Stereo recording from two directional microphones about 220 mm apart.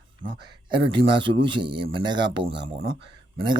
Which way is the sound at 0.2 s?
40° right (ahead or behind).